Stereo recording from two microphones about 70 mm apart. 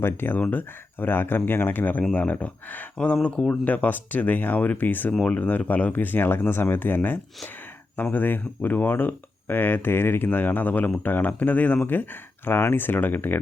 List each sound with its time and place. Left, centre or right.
0.0 s speech: left